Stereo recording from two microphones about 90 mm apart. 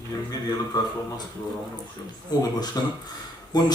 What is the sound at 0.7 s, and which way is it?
Speech, 45° left (ahead or behind).